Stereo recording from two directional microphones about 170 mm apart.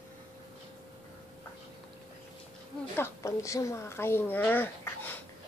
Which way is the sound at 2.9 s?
15° left (ahead or behind).